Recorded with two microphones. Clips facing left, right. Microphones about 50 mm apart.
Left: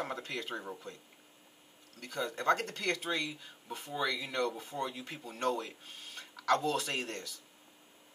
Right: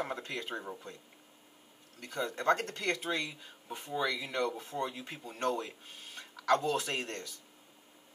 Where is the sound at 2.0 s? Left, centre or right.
Centre.